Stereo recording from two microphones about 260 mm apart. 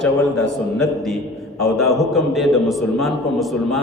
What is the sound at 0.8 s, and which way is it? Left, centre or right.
A man's voice, centre.